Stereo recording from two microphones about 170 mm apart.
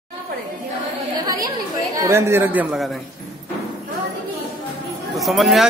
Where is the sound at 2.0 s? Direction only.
15° right (ahead or behind).